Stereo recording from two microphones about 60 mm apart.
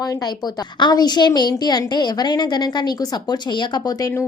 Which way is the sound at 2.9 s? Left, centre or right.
Left.